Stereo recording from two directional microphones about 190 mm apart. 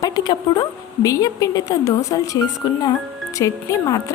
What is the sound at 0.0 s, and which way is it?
A woman's voice, 20° left (ahead or behind).